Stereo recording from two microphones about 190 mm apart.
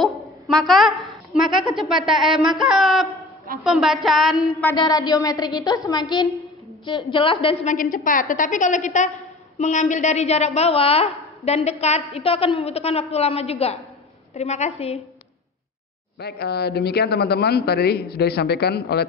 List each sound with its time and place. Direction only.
0.0 s a woman's voice: centre (ahead or behind)
2.7 s a sound: centre (ahead or behind)
4.7 s a woman's voice: 20° left (ahead or behind)
7.7 s a woman's voice: 45° left (ahead or behind)
16.2 s a man's voice: 60° left (ahead or behind)